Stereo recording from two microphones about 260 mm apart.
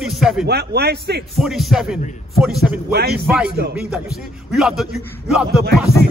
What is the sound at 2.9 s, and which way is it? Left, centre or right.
Speech, right.